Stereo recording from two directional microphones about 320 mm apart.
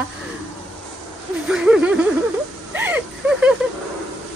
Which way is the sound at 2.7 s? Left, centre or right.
Centre.